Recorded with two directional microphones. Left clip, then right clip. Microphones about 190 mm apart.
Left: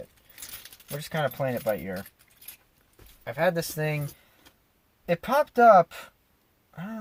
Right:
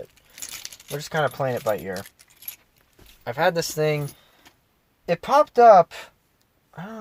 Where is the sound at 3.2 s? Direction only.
35° right (ahead or behind).